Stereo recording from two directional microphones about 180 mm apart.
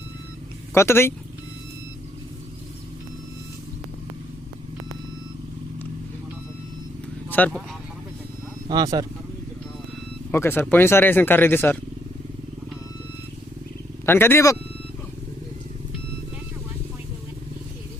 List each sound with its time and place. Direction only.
0.7 s speech: 15° left (ahead or behind)
7.3 s speech: 10° left (ahead or behind)
8.7 s speech: 20° right (ahead or behind)
10.3 s speech: 15° left (ahead or behind)
14.0 s speech: 15° left (ahead or behind)